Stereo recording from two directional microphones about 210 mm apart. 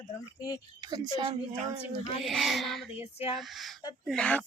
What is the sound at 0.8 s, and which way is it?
Speech, 20° right (ahead or behind).